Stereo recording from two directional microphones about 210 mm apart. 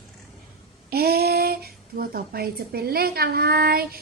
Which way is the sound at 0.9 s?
50° right (ahead or behind).